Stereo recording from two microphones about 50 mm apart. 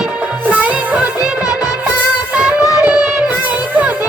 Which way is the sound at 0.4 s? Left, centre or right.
Right.